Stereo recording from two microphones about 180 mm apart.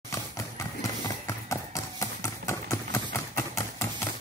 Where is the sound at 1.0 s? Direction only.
15° left (ahead or behind).